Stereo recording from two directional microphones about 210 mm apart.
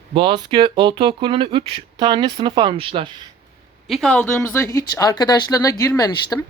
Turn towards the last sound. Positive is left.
turn(degrees=15)  # may be behind; listen again after turning